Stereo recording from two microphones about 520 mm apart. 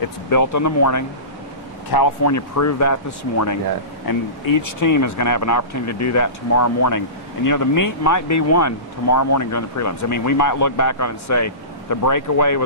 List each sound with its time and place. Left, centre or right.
0.3 s speech: left
4.7 s speech: left